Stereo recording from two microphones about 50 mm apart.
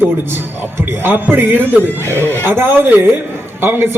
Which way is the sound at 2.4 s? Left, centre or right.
Right.